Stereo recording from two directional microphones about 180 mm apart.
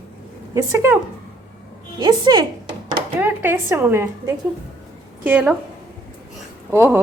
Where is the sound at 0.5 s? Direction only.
15° right (ahead or behind).